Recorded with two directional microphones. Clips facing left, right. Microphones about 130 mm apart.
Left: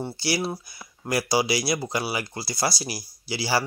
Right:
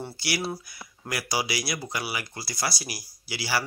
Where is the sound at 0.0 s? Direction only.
30° left (ahead or behind).